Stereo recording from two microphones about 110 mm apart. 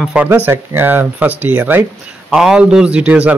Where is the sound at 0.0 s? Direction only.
10° right (ahead or behind).